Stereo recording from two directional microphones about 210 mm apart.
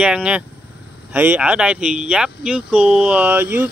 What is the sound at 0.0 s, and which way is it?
Speech, 5° right (ahead or behind).